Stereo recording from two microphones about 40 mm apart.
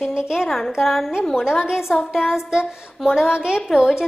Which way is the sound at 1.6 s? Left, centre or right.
Centre.